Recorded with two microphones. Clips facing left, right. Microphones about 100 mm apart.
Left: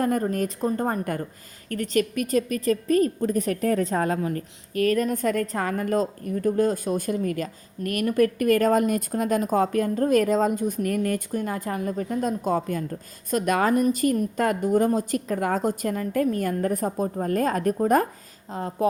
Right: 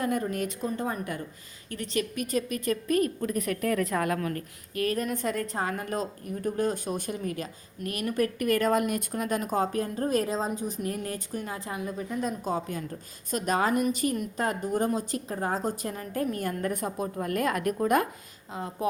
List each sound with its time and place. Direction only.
0.0 s a woman's voice: 40° left (ahead or behind)
4.7 s a woman's voice: 45° left (ahead or behind)
15.4 s a woman's voice: 70° left (ahead or behind)
15.6 s a woman's voice: 50° left (ahead or behind)